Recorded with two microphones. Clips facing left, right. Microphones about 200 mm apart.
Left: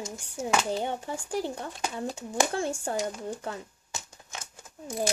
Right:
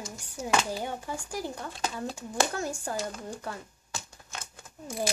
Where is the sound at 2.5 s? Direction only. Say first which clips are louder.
Left 3 dB; 25° left (ahead or behind).